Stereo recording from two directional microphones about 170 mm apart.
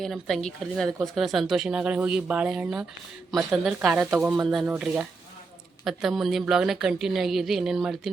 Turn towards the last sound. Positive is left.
turn(degrees=0)  # may be behind; listen again after turning